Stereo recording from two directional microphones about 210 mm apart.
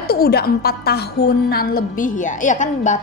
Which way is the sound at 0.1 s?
45° left (ahead or behind).